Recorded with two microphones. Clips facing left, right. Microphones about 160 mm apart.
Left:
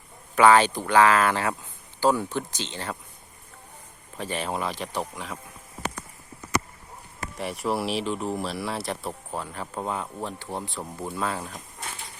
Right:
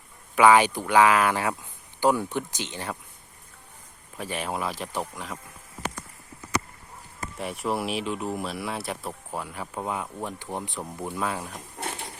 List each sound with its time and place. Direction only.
0.3 s speech: 10° right (ahead or behind)
4.2 s speech: 10° right (ahead or behind)
7.3 s speech: centre (ahead or behind)